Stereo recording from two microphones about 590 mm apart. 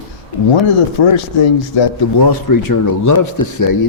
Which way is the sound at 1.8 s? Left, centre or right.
Left.